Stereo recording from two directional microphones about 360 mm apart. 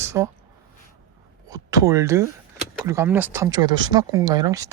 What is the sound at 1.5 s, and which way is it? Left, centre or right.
Speech, centre.